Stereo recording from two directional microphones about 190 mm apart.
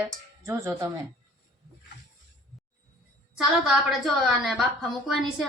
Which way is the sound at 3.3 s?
Centre (ahead or behind).